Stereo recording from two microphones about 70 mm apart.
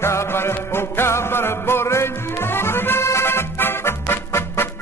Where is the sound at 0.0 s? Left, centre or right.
Left.